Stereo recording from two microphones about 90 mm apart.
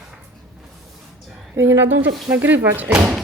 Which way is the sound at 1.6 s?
30° right (ahead or behind).